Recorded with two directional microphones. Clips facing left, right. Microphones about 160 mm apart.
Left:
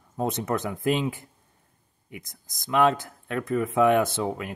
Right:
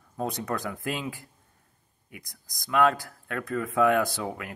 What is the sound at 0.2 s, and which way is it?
Speech, 20° left (ahead or behind).